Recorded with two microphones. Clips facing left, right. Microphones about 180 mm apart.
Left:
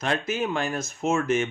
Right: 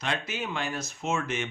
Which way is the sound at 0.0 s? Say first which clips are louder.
Left 6 dB; 45° left (ahead or behind).